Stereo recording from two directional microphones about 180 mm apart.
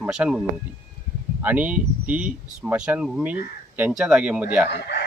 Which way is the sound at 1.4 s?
10° right (ahead or behind).